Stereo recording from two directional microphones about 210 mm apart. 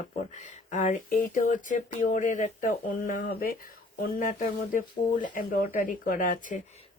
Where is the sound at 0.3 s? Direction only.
35° left (ahead or behind).